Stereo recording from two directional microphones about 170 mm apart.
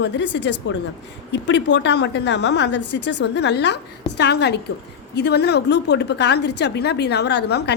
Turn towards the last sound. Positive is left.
turn(degrees=80)